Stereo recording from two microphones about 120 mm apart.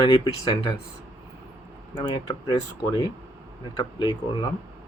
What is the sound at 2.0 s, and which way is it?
Speech, 40° left (ahead or behind).